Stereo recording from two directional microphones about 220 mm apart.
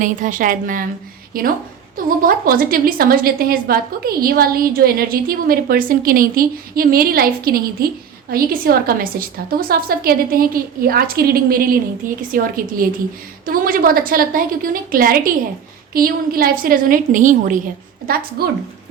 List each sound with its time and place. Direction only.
0.0 s a woman's voice: 35° right (ahead or behind)